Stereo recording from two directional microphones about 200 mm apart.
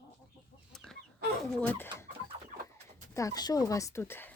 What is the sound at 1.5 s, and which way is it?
Speech, 10° left (ahead or behind).